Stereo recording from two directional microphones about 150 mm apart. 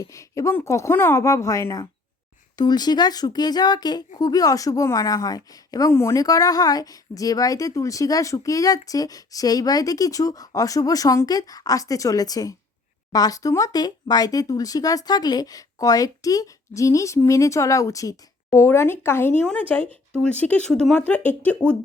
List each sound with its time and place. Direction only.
0.0 s speech: 20° left (ahead or behind)